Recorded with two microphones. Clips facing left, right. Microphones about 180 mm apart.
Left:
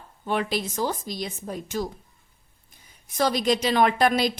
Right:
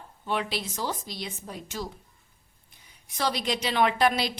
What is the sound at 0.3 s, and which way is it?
A woman's voice, 45° left (ahead or behind).